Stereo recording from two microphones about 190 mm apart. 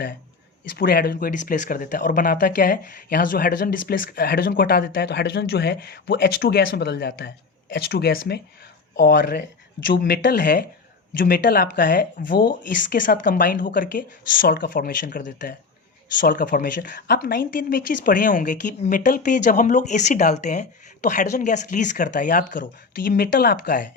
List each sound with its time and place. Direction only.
0.8 s speech: 50° left (ahead or behind)